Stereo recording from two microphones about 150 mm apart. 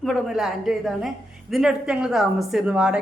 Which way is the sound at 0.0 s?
Centre (ahead or behind).